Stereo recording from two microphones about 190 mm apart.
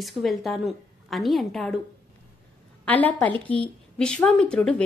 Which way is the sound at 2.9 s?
10° left (ahead or behind).